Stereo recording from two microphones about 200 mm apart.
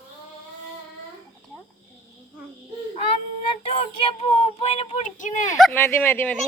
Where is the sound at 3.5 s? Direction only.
30° left (ahead or behind).